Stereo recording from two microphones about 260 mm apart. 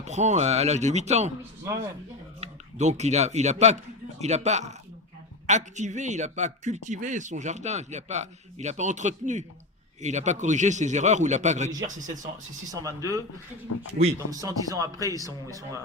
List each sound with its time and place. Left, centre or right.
0.0 s a man's voice: right
2.4 s a man's voice: right
12.7 s speech: centre